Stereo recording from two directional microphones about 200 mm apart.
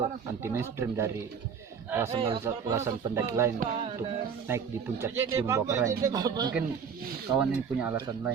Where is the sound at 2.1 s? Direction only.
25° right (ahead or behind).